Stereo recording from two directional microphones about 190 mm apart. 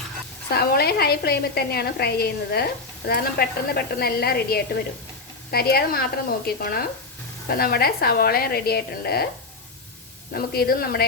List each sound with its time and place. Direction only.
0.5 s a woman's voice: 55° left (ahead or behind)
10.3 s a woman's voice: 55° left (ahead or behind)